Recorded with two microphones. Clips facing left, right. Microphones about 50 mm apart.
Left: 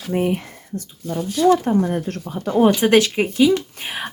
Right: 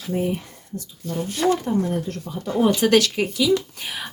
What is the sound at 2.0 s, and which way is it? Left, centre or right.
Speech, left.